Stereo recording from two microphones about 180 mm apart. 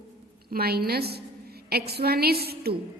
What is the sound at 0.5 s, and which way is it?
A woman's voice, 60° right (ahead or behind).